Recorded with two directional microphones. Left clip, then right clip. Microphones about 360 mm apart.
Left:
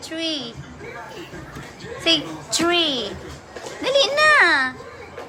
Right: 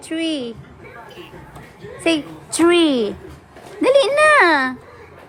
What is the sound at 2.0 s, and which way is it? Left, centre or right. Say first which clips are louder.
A woman's voice: even; centre.